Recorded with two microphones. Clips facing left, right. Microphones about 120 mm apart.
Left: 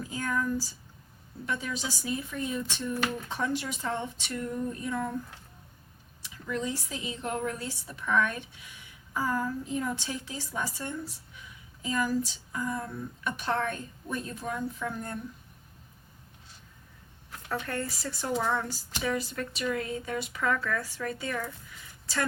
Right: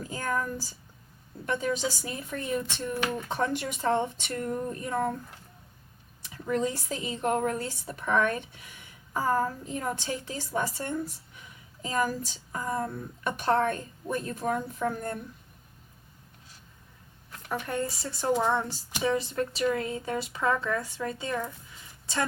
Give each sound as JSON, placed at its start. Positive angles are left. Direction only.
{"t": 0.1, "sound": "a woman's voice", "side_deg": -45}
{"t": 1.5, "sound": "a woman's voice", "side_deg": -45}
{"t": 6.3, "sound": "a woman's voice", "side_deg": -45}
{"t": 17.5, "sound": "speech", "side_deg": -15}